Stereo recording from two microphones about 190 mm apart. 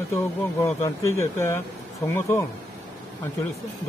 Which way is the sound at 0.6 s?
15° left (ahead or behind).